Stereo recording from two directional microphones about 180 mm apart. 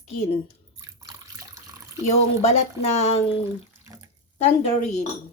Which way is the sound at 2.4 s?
35° left (ahead or behind).